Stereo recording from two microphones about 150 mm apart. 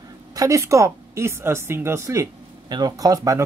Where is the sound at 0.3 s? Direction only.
20° right (ahead or behind).